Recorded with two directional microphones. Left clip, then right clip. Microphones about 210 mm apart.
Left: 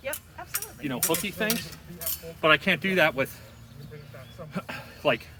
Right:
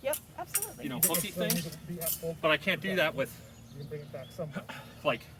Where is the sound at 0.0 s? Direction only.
20° right (ahead or behind).